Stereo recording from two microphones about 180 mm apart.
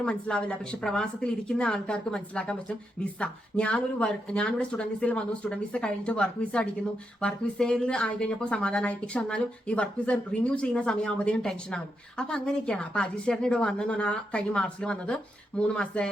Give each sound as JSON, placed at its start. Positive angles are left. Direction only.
{"t": 0.0, "sound": "a woman's voice", "side_deg": 5}